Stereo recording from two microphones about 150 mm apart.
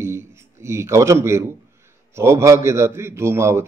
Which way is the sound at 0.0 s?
15° right (ahead or behind).